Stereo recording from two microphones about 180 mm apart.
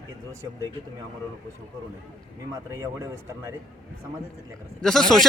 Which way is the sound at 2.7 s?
15° right (ahead or behind).